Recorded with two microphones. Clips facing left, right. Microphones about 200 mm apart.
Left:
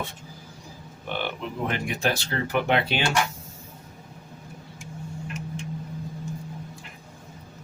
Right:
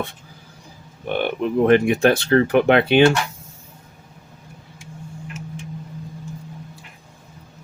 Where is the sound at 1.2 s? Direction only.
55° right (ahead or behind).